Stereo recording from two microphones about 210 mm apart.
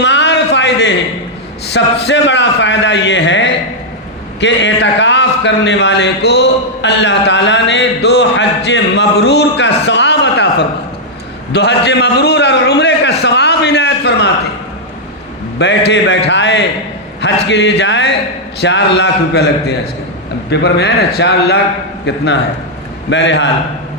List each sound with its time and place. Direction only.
0.0 s a sound: 55° left (ahead or behind)
1.7 s a man's voice: 55° left (ahead or behind)
15.5 s a man's voice: 55° left (ahead or behind)